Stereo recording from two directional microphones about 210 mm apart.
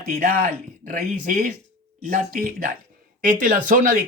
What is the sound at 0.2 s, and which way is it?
Speech, 40° right (ahead or behind).